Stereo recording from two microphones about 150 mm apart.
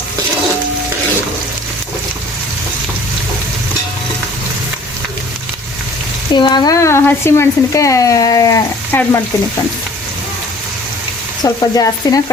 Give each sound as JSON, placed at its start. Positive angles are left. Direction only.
{"t": 6.3, "sound": "speech", "side_deg": 30}
{"t": 8.9, "sound": "stir", "side_deg": 15}
{"t": 11.4, "sound": "speech", "side_deg": 25}